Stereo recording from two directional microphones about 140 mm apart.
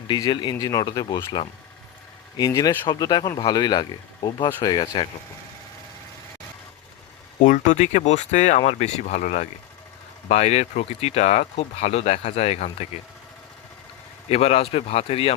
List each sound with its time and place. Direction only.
0.1 s speech: 30° left (ahead or behind)
7.4 s speech: 70° left (ahead or behind); by 12.9 s 50° left (ahead or behind)
14.3 s speech: 50° left (ahead or behind)